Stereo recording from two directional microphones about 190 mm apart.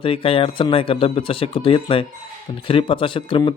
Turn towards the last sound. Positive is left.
turn(degrees=25)  # may be behind; listen again after turning